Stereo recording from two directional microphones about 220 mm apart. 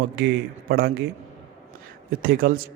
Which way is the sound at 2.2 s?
40° right (ahead or behind).